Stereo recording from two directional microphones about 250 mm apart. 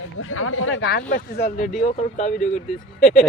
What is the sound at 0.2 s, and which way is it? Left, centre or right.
Speech, left.